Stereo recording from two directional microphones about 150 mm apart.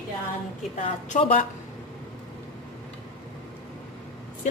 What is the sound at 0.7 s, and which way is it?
Speech, 55° left (ahead or behind).